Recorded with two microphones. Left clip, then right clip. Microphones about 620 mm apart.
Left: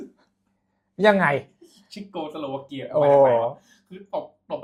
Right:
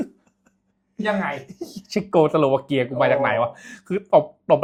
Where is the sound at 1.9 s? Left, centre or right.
Right.